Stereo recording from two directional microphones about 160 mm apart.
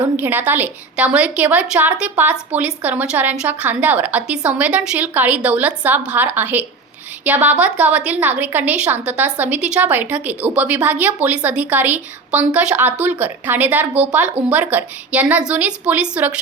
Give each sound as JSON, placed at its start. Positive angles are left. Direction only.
{"t": 0.2, "sound": "a woman's voice", "side_deg": -10}